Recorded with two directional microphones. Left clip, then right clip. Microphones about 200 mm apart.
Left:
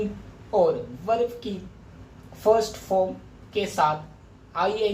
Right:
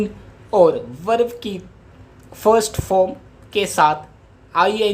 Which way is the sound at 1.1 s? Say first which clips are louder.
Right 6 dB; 45° right (ahead or behind).